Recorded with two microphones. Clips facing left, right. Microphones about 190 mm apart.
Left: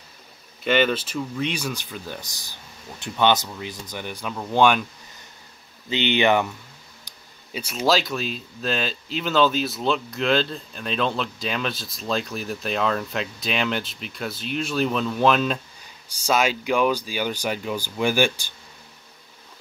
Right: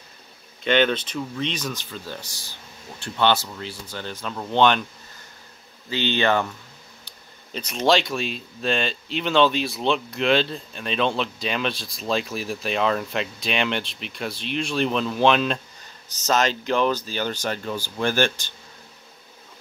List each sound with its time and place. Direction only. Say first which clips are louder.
0.7 s speech: even; 5° left (ahead or behind)
5.9 s speech: left 2 dB; 20° left (ahead or behind)